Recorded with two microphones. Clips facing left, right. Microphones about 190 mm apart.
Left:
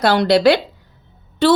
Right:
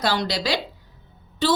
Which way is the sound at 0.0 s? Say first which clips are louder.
Left 11 dB; 60° left (ahead or behind).